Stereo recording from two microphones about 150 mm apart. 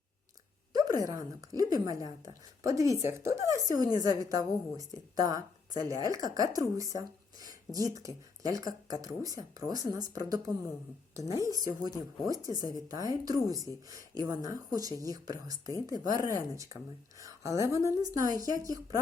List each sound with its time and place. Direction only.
0.9 s a woman's voice: 20° right (ahead or behind)